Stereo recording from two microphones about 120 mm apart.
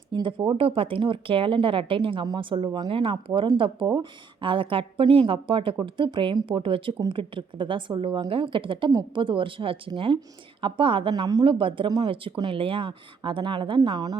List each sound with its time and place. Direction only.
0.1 s speech: 45° right (ahead or behind)
11.1 s speech: 30° right (ahead or behind)
11.4 s speech: 45° right (ahead or behind)